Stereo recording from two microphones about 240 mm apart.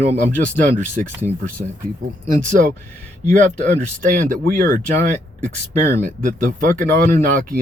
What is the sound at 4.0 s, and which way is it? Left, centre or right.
Speech, right.